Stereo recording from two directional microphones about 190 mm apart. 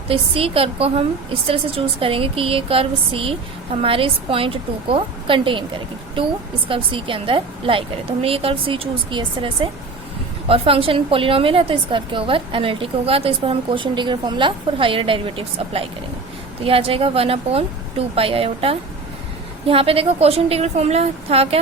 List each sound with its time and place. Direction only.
0.1 s a woman's voice: 30° right (ahead or behind)
10.5 s a woman's voice: 30° right (ahead or behind)